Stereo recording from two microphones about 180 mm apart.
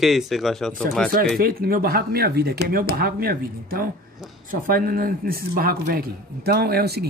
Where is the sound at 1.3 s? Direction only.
55° right (ahead or behind).